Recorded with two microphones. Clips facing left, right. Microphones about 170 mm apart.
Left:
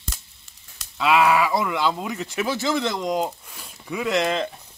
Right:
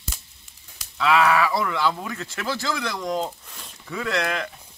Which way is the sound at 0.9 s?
15° left (ahead or behind).